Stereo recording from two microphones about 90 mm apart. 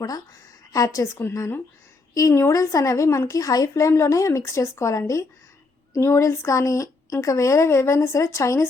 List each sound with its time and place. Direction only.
0.7 s a woman's voice: 40° left (ahead or behind)